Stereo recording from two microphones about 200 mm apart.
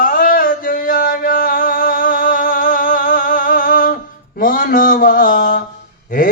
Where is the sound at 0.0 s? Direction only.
45° left (ahead or behind).